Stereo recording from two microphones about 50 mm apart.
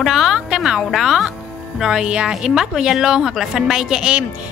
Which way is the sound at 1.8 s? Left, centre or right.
Centre.